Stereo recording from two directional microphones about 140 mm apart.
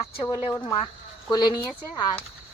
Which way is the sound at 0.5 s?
20° left (ahead or behind).